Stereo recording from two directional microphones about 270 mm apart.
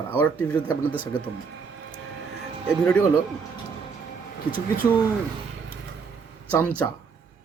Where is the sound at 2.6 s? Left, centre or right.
Centre.